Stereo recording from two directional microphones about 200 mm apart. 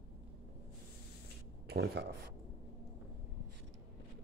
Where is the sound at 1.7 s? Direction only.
60° right (ahead or behind).